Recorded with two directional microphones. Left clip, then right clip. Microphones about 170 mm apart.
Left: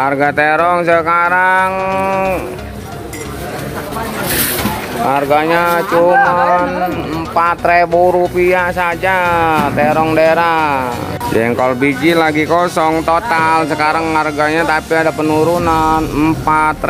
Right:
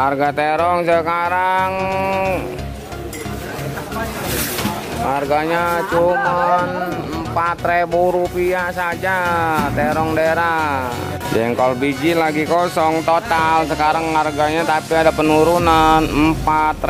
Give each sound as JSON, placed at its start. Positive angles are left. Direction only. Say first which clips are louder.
{"t": 0.0, "sound": "speech", "louder": "left 4 dB", "side_deg": 0}
{"t": 5.0, "sound": "speech", "louder": "left 6 dB", "side_deg": 5}
{"t": 8.4, "sound": "speech", "louder": "left 6 dB", "side_deg": 10}
{"t": 15.0, "sound": "speech", "louder": "even", "side_deg": -20}
{"t": 16.4, "sound": "speech", "louder": "left 5 dB", "side_deg": 0}